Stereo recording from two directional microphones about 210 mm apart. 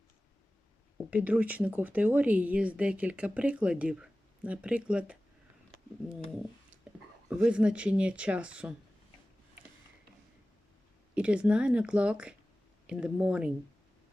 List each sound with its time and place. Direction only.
1.1 s speech: 5° right (ahead or behind)
6.9 s a sound: 5° right (ahead or behind)
7.3 s speech: 5° right (ahead or behind)
11.1 s speech: 5° right (ahead or behind)